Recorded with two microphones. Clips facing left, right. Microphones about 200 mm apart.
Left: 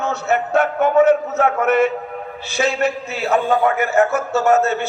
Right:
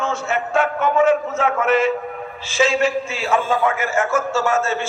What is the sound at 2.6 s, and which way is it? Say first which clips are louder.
A man's voice: right 1 dB; 60° left (ahead or behind).